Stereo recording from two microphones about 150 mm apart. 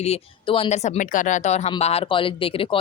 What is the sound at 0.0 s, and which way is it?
A woman's voice, 40° left (ahead or behind).